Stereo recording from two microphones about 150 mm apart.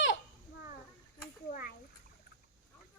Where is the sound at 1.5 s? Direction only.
85° left.